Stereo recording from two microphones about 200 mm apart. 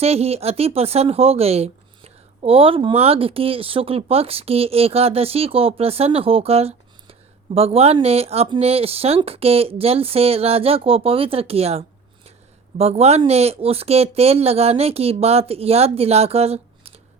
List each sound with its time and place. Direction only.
0.0 s speech: 30° right (ahead or behind)